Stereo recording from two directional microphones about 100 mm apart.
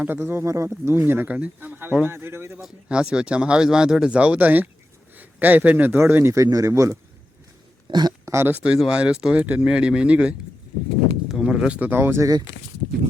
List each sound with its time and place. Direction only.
0.0 s speech: 20° right (ahead or behind)
2.6 s speech: 5° right (ahead or behind); by 7.0 s 30° right (ahead or behind)
7.9 s speech: 45° right (ahead or behind)
8.2 s speech: 25° right (ahead or behind)